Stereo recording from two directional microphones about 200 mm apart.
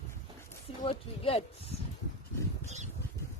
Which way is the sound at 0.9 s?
30° left (ahead or behind).